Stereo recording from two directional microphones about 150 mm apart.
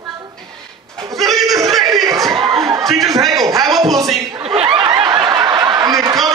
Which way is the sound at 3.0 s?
25° right (ahead or behind).